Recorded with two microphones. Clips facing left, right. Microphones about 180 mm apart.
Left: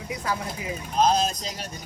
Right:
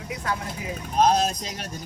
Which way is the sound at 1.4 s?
30° left (ahead or behind).